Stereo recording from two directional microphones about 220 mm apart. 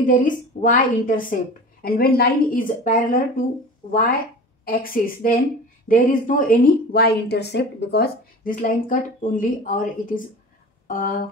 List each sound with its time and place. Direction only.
0.0 s a woman's voice: 35° left (ahead or behind)
4.6 s a woman's voice: 40° left (ahead or behind)